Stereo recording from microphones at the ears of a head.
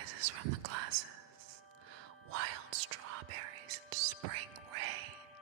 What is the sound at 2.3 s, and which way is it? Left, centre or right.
Whispering, right.